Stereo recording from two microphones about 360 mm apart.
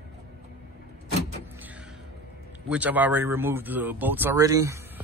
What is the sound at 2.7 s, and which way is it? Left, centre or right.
Speech, centre.